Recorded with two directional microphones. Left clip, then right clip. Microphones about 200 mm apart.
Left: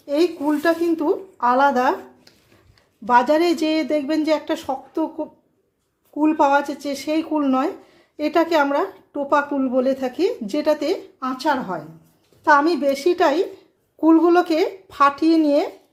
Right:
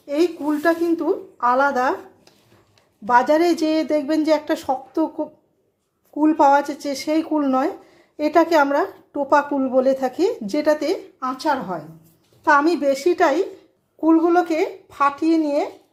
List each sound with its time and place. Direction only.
0.0 s speech: 5° left (ahead or behind)
3.1 s speech: centre (ahead or behind)
14.0 s speech: 15° left (ahead or behind)